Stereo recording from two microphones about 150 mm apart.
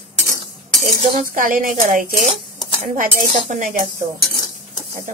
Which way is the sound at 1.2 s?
65° right (ahead or behind).